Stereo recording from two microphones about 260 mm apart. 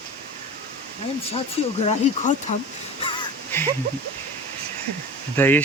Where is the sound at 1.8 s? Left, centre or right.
Left.